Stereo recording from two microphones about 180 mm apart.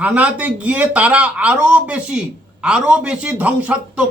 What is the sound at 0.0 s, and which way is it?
A man's voice, 10° right (ahead or behind).